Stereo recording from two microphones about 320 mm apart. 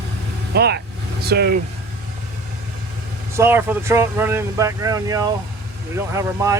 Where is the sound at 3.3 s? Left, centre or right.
Centre.